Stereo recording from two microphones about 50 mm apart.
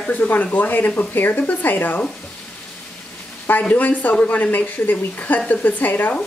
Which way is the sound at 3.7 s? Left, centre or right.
Left.